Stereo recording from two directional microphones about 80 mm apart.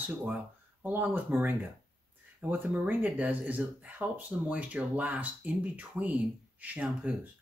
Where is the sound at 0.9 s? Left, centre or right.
Right.